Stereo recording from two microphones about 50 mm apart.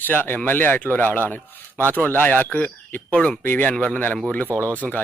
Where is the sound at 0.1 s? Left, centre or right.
Left.